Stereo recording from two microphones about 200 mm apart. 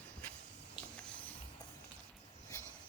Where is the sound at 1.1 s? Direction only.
5° left (ahead or behind).